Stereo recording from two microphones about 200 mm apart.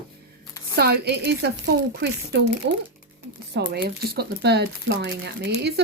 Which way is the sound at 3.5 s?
55° right (ahead or behind).